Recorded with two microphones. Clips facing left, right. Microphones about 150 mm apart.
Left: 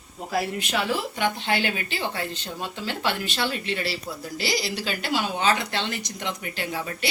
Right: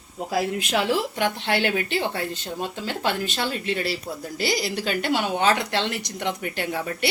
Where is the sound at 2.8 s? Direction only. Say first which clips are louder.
Right 1 dB; 45° right (ahead or behind).